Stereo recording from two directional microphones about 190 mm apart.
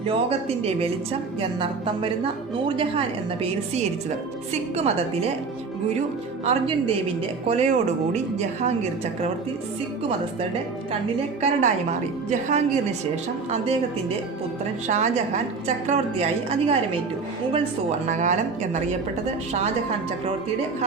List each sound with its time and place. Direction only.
0.1 s a woman's voice: 30° right (ahead or behind)
6.4 s a woman's voice: 30° right (ahead or behind)
11.3 s a woman's voice: 40° right (ahead or behind)
14.8 s a woman's voice: 35° right (ahead or behind)
18.0 s a woman's voice: 40° right (ahead or behind)